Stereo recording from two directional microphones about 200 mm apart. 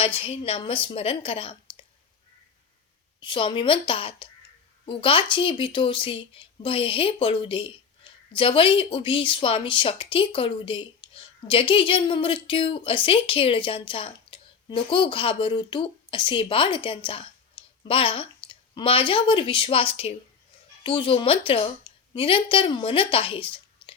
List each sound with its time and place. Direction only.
0.2 s speech: 30° left (ahead or behind)
3.2 s a woman's voice: 25° left (ahead or behind)